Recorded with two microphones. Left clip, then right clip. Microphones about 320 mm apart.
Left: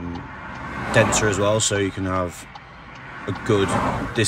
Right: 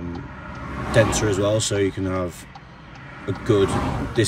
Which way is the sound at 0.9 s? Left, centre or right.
Centre.